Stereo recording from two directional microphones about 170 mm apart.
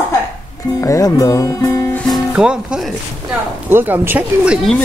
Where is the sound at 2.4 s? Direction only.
5° right (ahead or behind).